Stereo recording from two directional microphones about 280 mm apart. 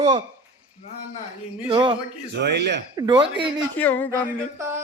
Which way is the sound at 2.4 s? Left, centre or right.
Right.